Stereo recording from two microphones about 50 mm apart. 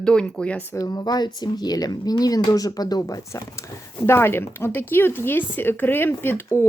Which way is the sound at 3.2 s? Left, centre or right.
Left.